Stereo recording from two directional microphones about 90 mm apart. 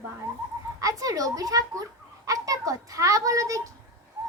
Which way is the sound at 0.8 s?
40° right (ahead or behind).